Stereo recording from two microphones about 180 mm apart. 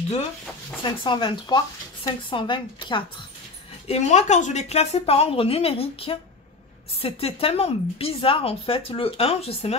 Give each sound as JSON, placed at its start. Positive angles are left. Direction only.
{"t": 0.8, "sound": "a woman's voice", "side_deg": 25}
{"t": 3.8, "sound": "speech", "side_deg": 35}